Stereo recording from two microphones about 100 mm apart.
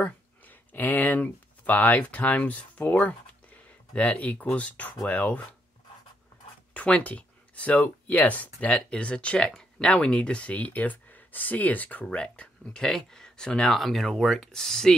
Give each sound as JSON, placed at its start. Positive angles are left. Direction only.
{"t": 0.0, "sound": "speech", "side_deg": 15}
{"t": 6.7, "sound": "speech", "side_deg": 15}